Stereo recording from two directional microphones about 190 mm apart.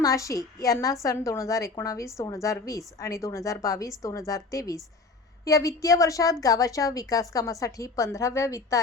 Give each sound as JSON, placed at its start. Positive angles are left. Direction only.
{"t": 0.0, "sound": "a woman's voice", "side_deg": 15}